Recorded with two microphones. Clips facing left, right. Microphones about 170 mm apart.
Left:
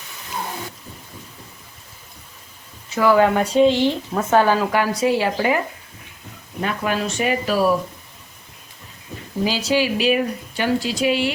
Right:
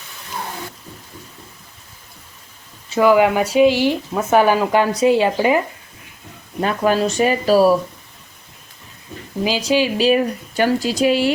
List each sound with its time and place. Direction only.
2.9 s speech: 15° right (ahead or behind)
6.6 s speech: 35° right (ahead or behind)
9.4 s speech: 15° right (ahead or behind)
10.6 s speech: 45° right (ahead or behind)